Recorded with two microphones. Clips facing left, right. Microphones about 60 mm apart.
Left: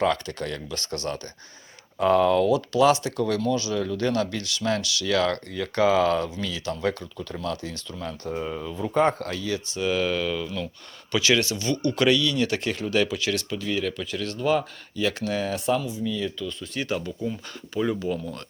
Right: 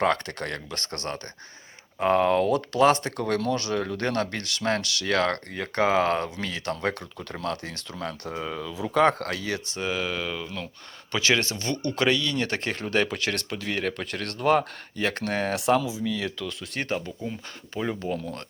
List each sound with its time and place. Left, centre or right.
0.0 s speech: right
2.0 s speech: right
2.5 s speech: right
9.8 s speech: centre
11.1 s speech: right
17.2 s speech: right